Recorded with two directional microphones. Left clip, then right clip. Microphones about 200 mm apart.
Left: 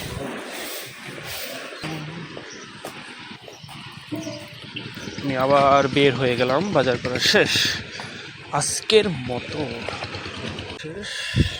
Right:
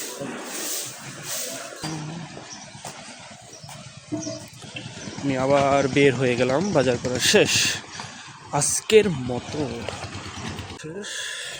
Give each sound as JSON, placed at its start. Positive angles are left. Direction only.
{"t": 5.3, "sound": "speech", "side_deg": -25}
{"t": 11.0, "sound": "goat", "side_deg": -15}